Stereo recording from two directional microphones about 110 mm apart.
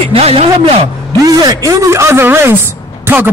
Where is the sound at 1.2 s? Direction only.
35° right (ahead or behind).